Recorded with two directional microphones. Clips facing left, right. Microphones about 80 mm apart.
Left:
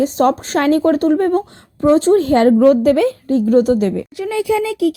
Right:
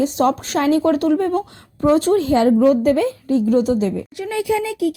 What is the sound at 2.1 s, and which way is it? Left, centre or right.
Speech, left.